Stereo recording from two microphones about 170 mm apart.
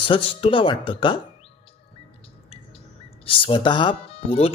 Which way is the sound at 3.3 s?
30° left (ahead or behind).